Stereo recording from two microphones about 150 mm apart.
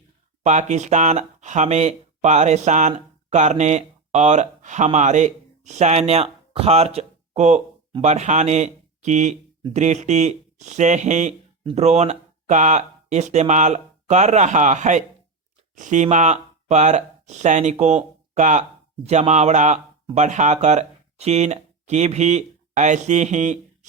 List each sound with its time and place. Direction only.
0.4 s speech: 50° right (ahead or behind)